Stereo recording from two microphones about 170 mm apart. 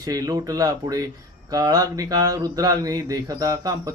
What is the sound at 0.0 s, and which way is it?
Mantra, 20° right (ahead or behind).